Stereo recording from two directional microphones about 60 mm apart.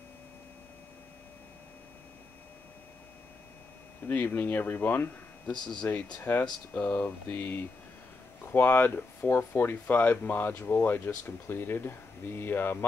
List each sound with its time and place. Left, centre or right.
4.1 s speech: left